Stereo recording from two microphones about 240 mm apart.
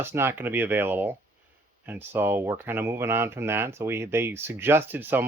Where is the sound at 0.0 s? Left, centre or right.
Centre.